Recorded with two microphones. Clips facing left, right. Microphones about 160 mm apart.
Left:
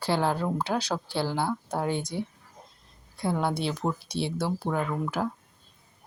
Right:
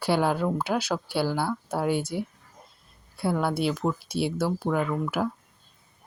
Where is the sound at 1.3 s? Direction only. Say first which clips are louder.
Right 1 dB; 20° left (ahead or behind).